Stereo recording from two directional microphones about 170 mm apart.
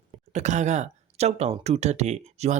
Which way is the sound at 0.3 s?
45° right (ahead or behind).